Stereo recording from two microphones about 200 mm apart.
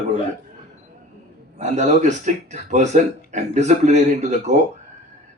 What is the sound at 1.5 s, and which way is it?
Speech, 35° right (ahead or behind).